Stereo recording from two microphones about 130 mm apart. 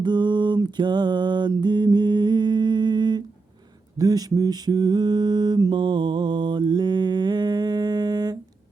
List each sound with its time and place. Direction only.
0.0 s music: 35° right (ahead or behind)
3.9 s mantra: 30° right (ahead or behind)